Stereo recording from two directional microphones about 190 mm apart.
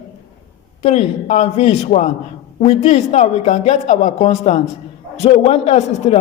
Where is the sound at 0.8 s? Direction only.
35° left (ahead or behind).